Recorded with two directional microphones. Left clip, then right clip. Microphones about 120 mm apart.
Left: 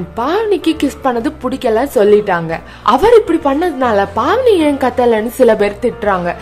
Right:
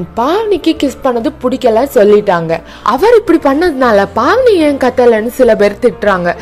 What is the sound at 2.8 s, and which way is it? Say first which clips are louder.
Speech: left 1 dB; 55° right (ahead or behind).